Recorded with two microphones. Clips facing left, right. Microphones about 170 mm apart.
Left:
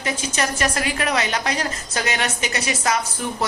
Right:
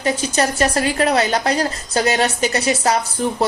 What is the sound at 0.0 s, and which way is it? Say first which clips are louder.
A woman's voice: right 6 dB; 35° right (ahead or behind).